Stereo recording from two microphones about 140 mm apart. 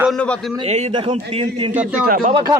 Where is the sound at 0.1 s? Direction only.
5° left (ahead or behind).